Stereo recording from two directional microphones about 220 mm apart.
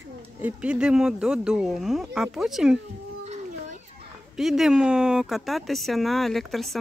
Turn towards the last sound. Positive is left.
turn(degrees=0)  # may be behind; listen again after turning